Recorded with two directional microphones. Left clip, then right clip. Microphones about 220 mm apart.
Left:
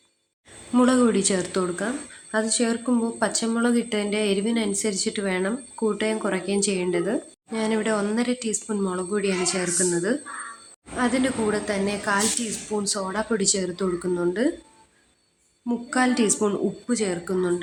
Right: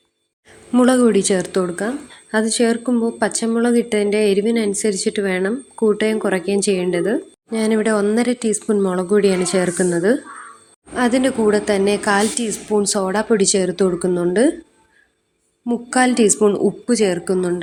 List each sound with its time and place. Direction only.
0.7 s a woman's voice: 20° right (ahead or behind)
15.6 s a woman's voice: 20° right (ahead or behind)